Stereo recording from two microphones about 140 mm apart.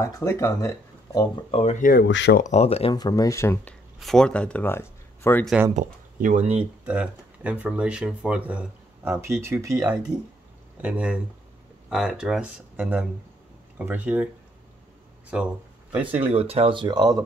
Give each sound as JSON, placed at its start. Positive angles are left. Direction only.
{"t": 0.0, "sound": "speech", "side_deg": 20}
{"t": 1.5, "sound": "speech", "side_deg": 50}
{"t": 1.8, "sound": "speech", "side_deg": 80}
{"t": 2.5, "sound": "speech", "side_deg": 45}
{"t": 2.9, "sound": "speech", "side_deg": 30}
{"t": 4.0, "sound": "speech", "side_deg": 5}
{"t": 5.8, "sound": "speech", "side_deg": -60}
{"t": 6.6, "sound": "speech", "side_deg": -10}
{"t": 10.8, "sound": "speech", "side_deg": -10}
{"t": 16.3, "sound": "speech", "side_deg": -45}